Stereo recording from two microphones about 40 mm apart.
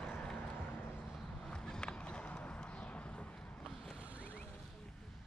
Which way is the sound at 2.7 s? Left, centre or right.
Left.